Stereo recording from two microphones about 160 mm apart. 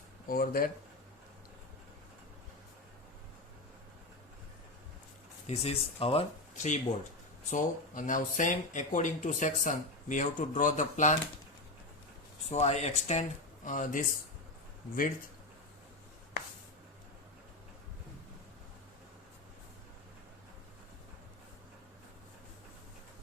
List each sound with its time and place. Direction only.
0.3 s speech: 65° left (ahead or behind)
5.5 s speech: 40° left (ahead or behind)
12.5 s speech: 45° left (ahead or behind); by 15.3 s 60° left (ahead or behind)